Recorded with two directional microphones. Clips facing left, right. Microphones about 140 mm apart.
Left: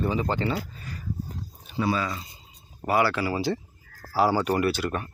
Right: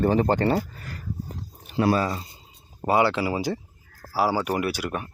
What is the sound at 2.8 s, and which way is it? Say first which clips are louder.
Speech: right 2 dB; 20° right (ahead or behind).